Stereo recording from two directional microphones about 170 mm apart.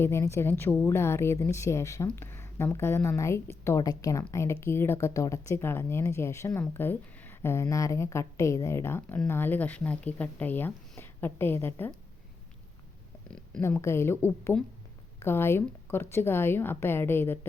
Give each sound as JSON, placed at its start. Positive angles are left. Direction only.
{"t": 0.0, "sound": "speech", "side_deg": 15}
{"t": 13.6, "sound": "speech", "side_deg": 15}